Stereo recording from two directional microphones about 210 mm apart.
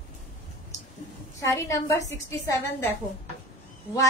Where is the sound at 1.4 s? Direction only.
15° left (ahead or behind).